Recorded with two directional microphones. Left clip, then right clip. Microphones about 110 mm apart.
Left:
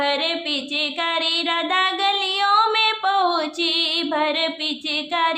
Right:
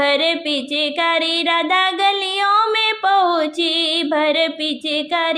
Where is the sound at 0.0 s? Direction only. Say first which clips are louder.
Right 5 dB; 45° right (ahead or behind).